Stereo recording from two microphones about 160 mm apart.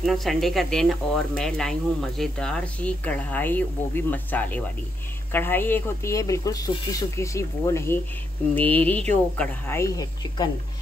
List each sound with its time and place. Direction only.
0.0 s speech: centre (ahead or behind); by 10.5 s 25° left (ahead or behind)